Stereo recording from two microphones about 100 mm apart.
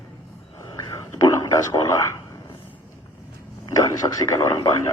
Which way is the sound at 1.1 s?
35° left (ahead or behind).